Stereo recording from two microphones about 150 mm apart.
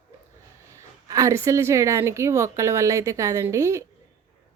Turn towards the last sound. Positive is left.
turn(degrees=-20)  # may be behind; listen again after turning